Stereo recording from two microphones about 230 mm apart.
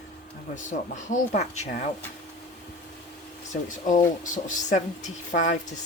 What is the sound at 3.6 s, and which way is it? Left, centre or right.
Speech, left.